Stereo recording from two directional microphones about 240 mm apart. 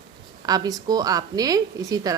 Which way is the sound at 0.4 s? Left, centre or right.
Centre.